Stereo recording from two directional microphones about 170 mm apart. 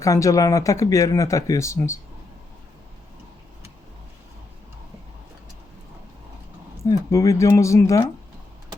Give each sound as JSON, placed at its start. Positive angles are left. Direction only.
{"t": 0.0, "sound": "speech", "side_deg": 20}
{"t": 6.8, "sound": "speech", "side_deg": 20}